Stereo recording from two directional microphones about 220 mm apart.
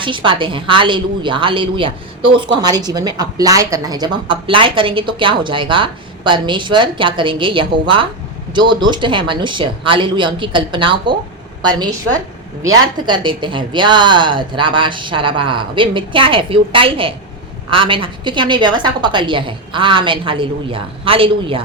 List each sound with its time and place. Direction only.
0.0 s a woman's voice: 20° right (ahead or behind)